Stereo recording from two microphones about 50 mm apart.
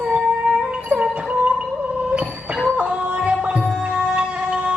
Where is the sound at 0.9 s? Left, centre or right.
Right.